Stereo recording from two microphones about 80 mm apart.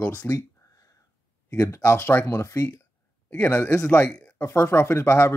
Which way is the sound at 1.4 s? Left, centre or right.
Left.